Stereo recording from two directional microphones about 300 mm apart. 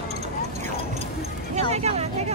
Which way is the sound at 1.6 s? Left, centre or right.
Right.